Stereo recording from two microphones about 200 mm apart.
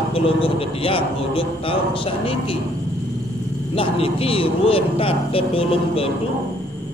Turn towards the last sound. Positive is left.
turn(degrees=30)  # may be behind; listen again after turning